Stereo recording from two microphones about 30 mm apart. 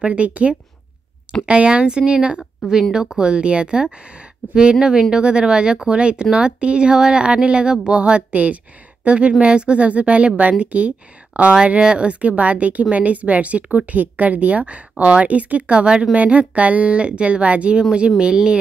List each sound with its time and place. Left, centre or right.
0.0 s speech: right
1.4 s speech: right
8.3 s speech: right
9.0 s speech: right
11.8 s speech: right
12.1 s speech: right
13.9 s speech: right
15.7 s speech: right
16.2 s speech: right
18.2 s speech: right